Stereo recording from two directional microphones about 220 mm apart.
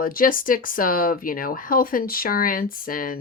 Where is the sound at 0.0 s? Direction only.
40° left (ahead or behind).